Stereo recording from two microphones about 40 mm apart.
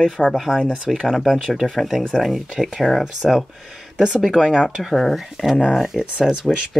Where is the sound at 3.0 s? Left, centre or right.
Centre.